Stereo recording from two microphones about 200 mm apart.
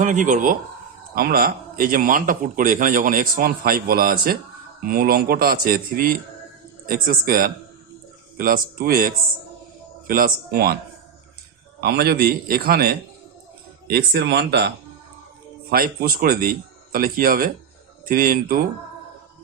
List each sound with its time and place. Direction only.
0.0 s a man's voice: 40° right (ahead or behind)
11.8 s a man's voice: 55° right (ahead or behind)
15.7 s a man's voice: 50° right (ahead or behind)